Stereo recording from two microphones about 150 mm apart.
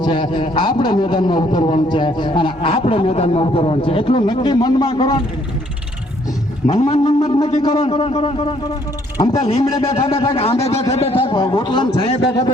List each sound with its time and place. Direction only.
0.0 s a man's voice: 30° left (ahead or behind)
6.9 s a man's voice: 40° left (ahead or behind)
9.1 s speech: 25° left (ahead or behind)
9.4 s a man's voice: 40° left (ahead or behind)